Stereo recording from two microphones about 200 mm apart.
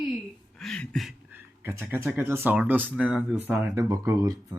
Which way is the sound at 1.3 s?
10° right (ahead or behind).